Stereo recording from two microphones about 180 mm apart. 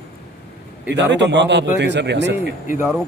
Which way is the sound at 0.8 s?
75° right (ahead or behind).